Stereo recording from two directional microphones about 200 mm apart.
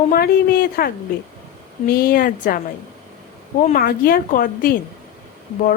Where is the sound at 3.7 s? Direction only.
45° left (ahead or behind).